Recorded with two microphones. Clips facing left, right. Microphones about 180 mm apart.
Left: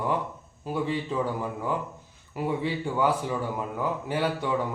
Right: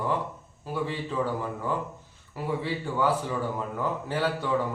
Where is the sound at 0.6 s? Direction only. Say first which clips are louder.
Left 2 dB; 15° left (ahead or behind).